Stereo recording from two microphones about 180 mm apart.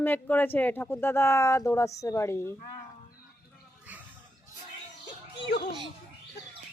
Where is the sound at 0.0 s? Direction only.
10° left (ahead or behind).